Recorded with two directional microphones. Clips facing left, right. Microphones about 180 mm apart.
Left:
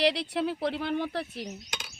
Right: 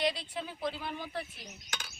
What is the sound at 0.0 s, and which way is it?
Speech, 75° left (ahead or behind).